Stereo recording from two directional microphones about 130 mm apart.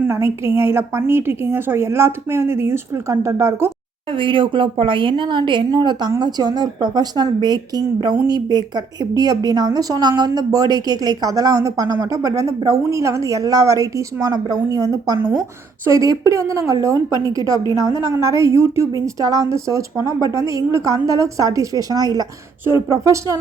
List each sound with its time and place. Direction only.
0.0 s a woman's voice: 20° right (ahead or behind)
4.1 s a woman's voice: 40° right (ahead or behind); by 17.6 s 25° right (ahead or behind)
17.6 s a woman's voice: 30° left (ahead or behind)
18.2 s a woman's voice: 20° right (ahead or behind)